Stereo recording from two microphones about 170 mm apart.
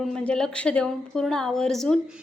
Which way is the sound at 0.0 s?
5° left (ahead or behind).